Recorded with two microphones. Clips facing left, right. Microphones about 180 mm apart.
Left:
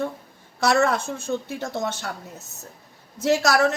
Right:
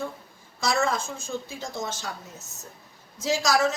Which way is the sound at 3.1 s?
65° left (ahead or behind).